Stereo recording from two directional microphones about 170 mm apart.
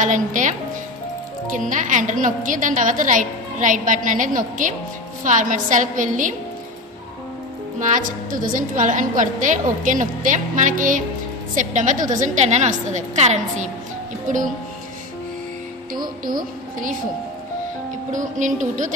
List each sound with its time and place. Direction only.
0.0 s a woman's voice: 45° right (ahead or behind)
1.6 s a woman's voice: 50° right (ahead or behind)
7.8 s a woman's voice: 50° right (ahead or behind)
16.3 s a woman's voice: 55° right (ahead or behind)
18.1 s a woman's voice: 50° right (ahead or behind)